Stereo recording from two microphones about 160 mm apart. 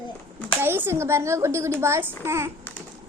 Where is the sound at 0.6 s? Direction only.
15° right (ahead or behind).